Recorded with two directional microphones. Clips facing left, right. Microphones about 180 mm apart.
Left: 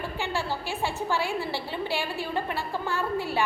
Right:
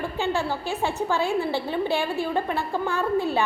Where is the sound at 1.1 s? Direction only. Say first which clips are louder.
Right 5 dB; 20° right (ahead or behind).